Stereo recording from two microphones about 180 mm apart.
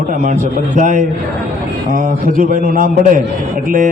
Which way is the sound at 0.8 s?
45° right (ahead or behind).